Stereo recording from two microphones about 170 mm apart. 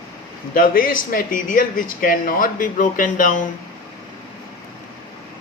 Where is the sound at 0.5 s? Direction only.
55° left (ahead or behind).